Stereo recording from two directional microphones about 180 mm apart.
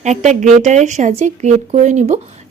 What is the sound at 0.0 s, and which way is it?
Speech, 40° right (ahead or behind).